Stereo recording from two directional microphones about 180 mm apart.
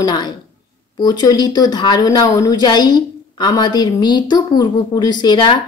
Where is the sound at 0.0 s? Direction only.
20° left (ahead or behind).